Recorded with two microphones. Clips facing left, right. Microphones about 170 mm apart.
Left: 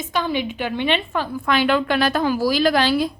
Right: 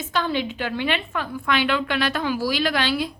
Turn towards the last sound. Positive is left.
turn(degrees=40)  # may be behind; listen again after turning